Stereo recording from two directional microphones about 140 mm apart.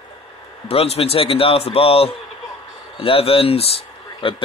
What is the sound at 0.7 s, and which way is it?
Speech, 45° left (ahead or behind).